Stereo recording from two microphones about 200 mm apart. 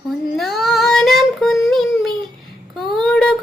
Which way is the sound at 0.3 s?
Centre (ahead or behind).